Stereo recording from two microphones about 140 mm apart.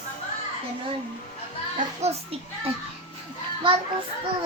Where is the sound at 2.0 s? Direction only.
50° right (ahead or behind).